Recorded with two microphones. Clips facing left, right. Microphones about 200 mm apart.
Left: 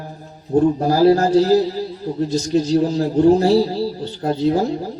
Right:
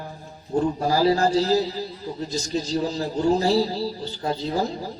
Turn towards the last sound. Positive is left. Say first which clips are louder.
# left 8 dB
turn(degrees=55)  # may be behind; listen again after turning